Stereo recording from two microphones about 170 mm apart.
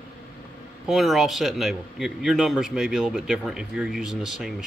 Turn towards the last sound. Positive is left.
turn(degrees=0)  # may be behind; listen again after turning